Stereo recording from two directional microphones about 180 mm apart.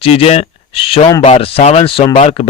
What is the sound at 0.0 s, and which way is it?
Speech, 30° left (ahead or behind).